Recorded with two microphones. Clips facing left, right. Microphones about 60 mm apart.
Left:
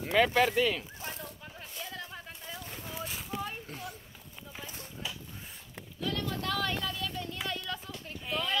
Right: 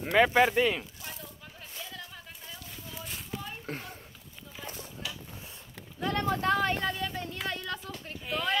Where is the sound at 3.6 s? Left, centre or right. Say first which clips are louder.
Right 3 dB; right.